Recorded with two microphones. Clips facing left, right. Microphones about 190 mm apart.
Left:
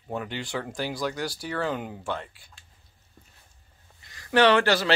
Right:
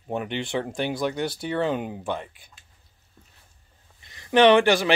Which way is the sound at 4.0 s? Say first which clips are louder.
Right 3 dB; 20° right (ahead or behind).